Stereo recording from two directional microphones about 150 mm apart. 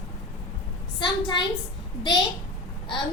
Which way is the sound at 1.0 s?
30° left (ahead or behind).